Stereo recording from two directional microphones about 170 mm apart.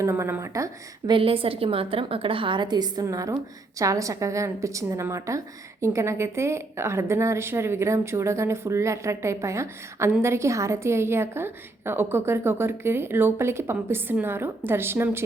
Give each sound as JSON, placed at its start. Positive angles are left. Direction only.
{"t": 0.0, "sound": "a woman's voice", "side_deg": -15}